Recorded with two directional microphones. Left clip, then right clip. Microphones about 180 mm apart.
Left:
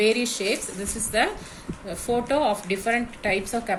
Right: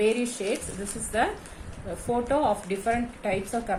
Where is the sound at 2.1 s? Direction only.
55° left (ahead or behind).